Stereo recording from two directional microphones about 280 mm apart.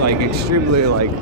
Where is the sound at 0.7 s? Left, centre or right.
Right.